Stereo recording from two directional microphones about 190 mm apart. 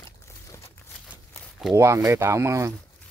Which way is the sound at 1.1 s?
Centre (ahead or behind).